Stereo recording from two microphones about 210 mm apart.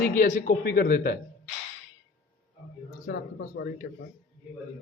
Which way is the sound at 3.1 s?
60° left (ahead or behind).